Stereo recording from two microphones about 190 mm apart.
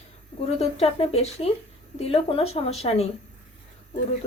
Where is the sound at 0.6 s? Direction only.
35° left (ahead or behind).